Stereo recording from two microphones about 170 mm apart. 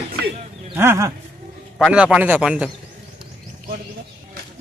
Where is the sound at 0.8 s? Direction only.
15° right (ahead or behind).